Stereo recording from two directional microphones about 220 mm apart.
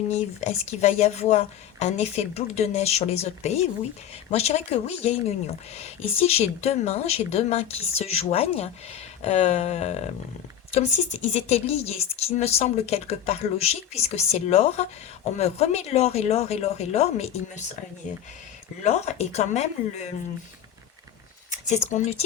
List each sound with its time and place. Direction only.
0.1 s a woman's voice: 30° left (ahead or behind)
18.8 s a woman's voice: 30° left (ahead or behind)
21.7 s speech: 35° left (ahead or behind)